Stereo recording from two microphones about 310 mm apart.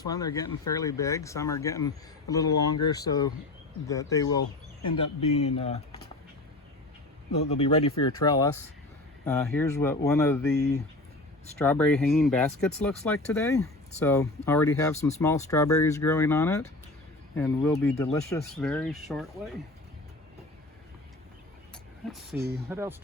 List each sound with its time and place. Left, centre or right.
0.0 s speech: centre
7.3 s speech: centre
11.6 s speech: centre
22.1 s speech: centre